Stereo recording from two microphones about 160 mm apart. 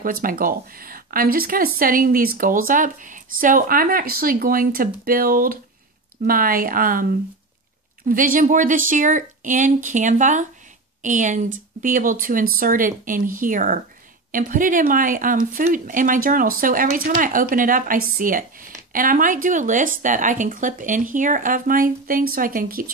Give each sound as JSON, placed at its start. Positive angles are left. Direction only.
{"t": 0.0, "sound": "speech", "side_deg": -60}